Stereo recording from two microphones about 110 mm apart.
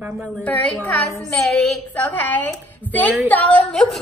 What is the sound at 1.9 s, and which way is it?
A woman's voice, 15° left (ahead or behind).